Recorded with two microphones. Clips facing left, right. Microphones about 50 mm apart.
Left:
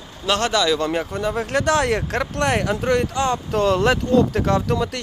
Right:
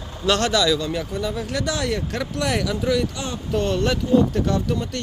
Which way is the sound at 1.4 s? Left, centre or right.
Left.